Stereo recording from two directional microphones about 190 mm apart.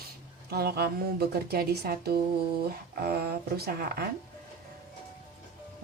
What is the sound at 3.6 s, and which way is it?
Speech, 55° right (ahead or behind).